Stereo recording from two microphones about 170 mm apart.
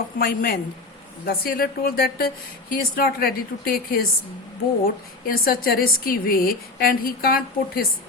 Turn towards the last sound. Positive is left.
turn(degrees=60)  # may be behind; listen again after turning